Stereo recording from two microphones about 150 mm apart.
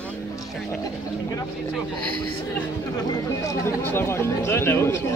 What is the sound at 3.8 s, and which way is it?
Speech, 15° left (ahead or behind).